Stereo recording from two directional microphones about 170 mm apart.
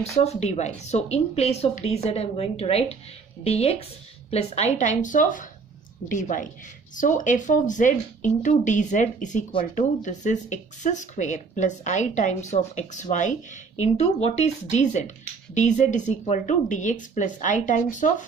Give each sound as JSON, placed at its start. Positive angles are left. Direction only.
{"t": 0.2, "sound": "a woman's voice", "side_deg": 40}